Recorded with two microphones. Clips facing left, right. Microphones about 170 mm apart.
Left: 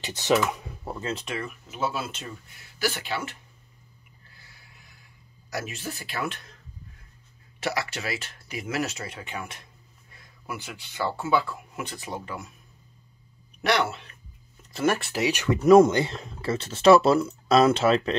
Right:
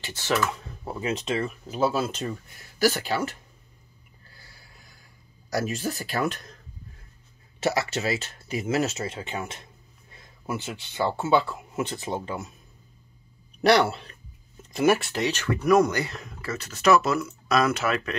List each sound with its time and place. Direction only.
0.0 s speech: 20° left (ahead or behind)
0.9 s speech: 20° right (ahead or behind); by 3.3 s 40° right (ahead or behind)
4.3 s a sound: 35° right (ahead or behind)
5.5 s speech: 40° right (ahead or behind)
7.6 s speech: 25° right (ahead or behind)
13.6 s speech: 35° right (ahead or behind)
14.7 s speech: 15° right (ahead or behind)
15.0 s speech: 5° left (ahead or behind); by 18.1 s 25° left (ahead or behind)